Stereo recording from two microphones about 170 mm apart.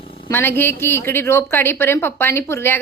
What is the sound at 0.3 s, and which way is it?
A woman's voice, 15° left (ahead or behind).